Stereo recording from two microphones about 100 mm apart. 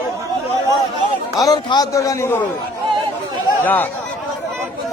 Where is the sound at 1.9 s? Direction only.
30° left (ahead or behind).